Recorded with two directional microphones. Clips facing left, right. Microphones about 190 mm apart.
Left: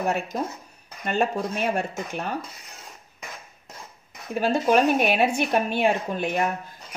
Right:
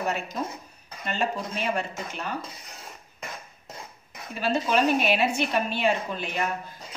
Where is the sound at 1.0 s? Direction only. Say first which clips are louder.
Left 5 dB; 50° left (ahead or behind).